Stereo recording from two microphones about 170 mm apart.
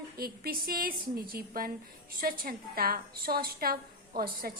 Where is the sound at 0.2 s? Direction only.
60° right (ahead or behind).